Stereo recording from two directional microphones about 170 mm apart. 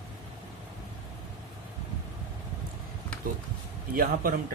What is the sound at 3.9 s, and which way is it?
Speech, 55° right (ahead or behind).